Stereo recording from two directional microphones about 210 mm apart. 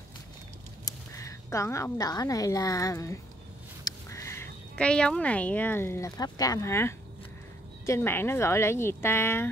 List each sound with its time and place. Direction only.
0.8 s a woman's voice: 15° left (ahead or behind)